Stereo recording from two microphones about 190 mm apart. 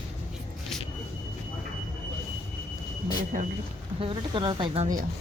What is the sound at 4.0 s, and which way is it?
Speech, 25° right (ahead or behind).